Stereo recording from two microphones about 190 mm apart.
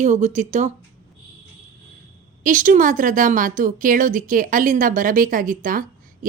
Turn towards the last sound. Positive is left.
turn(degrees=-45)  # may be behind; listen again after turning